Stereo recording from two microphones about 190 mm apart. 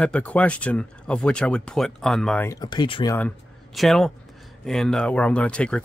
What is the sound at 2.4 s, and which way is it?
Speech, 20° left (ahead or behind).